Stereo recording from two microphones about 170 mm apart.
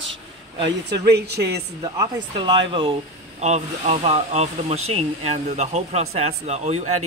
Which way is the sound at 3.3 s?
40° right (ahead or behind).